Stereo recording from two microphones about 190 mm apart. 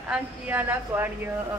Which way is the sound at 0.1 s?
10° right (ahead or behind).